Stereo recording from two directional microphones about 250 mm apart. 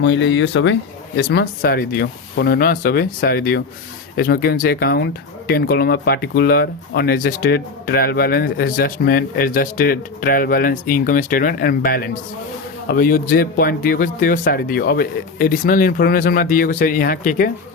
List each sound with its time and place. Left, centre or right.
0.0 s speech: left